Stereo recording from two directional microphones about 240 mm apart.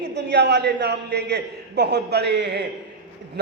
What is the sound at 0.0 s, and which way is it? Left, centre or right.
A man's voice, right.